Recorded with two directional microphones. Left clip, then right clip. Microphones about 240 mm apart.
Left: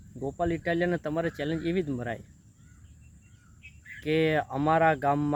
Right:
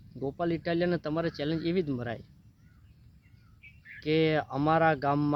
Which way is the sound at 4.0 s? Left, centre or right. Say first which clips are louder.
Left 1 dB; centre.